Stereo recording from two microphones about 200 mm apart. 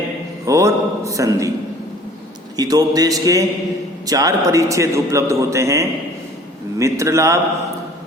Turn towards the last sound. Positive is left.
turn(degrees=-15)  # may be behind; listen again after turning